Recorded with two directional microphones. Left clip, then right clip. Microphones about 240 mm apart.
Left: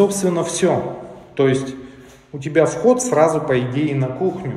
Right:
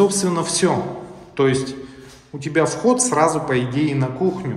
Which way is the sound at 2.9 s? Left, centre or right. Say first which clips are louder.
Left 2 dB; centre.